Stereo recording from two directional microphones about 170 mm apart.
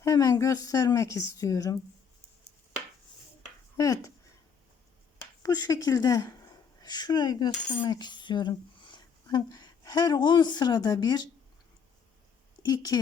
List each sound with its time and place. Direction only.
0.0 s speech: 20° left (ahead or behind)
3.8 s speech: 20° left (ahead or behind)
5.4 s speech: 20° left (ahead or behind)
6.8 s cutlery: 25° left (ahead or behind)
12.6 s speech: 25° left (ahead or behind)